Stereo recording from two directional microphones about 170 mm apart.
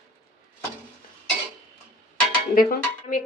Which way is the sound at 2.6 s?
60° left (ahead or behind).